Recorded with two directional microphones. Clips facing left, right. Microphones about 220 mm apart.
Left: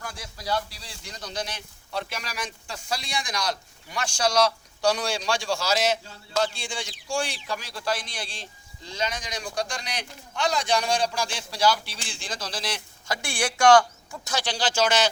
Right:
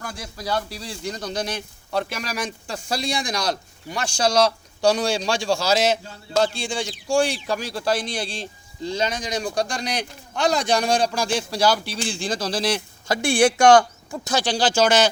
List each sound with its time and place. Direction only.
0.0 s speech: 45° right (ahead or behind); by 13.8 s 20° right (ahead or behind)
14.1 s speech: 35° right (ahead or behind)